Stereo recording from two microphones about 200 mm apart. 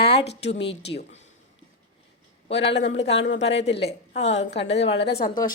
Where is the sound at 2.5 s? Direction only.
60° left (ahead or behind).